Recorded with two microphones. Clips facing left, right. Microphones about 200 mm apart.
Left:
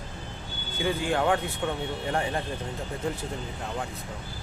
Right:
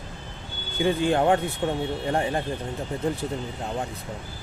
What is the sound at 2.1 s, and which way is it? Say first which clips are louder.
Speech: right 3 dB; 20° right (ahead or behind).